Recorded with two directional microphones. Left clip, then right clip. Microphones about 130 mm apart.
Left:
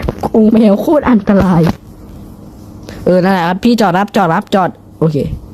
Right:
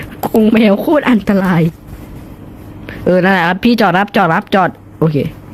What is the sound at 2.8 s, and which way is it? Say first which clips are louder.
Speech: left 1 dB; 5° left (ahead or behind).